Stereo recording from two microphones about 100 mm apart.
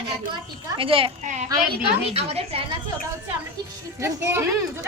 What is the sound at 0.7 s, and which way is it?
Speech, 65° right (ahead or behind).